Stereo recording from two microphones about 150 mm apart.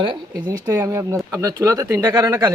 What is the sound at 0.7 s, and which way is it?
Speech, 20° right (ahead or behind).